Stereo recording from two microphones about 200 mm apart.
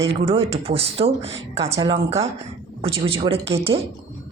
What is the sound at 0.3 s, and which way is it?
Speech, 30° right (ahead or behind).